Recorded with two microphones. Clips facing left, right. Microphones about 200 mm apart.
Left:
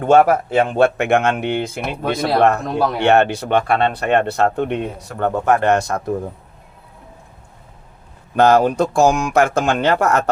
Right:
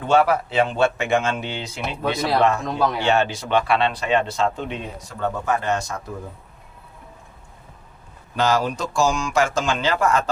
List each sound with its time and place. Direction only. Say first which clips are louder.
0.0 s speech: left 5 dB; 50° left (ahead or behind)
8.4 s speech: left 8 dB; 55° left (ahead or behind)